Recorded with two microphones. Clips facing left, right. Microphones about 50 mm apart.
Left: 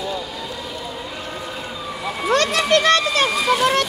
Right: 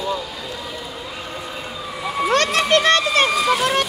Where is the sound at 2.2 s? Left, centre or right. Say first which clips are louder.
Even; right.